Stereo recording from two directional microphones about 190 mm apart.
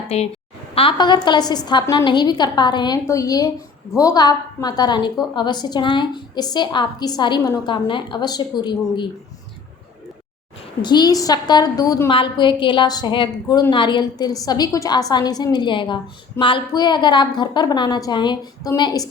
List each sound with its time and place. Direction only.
0.1 s a woman's voice: 35° left (ahead or behind)
10.8 s a woman's voice: 20° left (ahead or behind)